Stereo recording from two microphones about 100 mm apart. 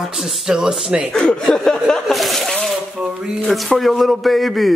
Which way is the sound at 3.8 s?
Centre (ahead or behind).